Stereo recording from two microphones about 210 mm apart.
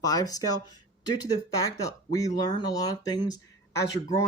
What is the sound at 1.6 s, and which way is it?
Speech, 15° left (ahead or behind).